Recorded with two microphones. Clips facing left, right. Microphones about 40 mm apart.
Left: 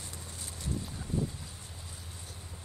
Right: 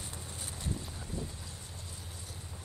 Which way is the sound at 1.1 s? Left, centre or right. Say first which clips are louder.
Left 8 dB; left.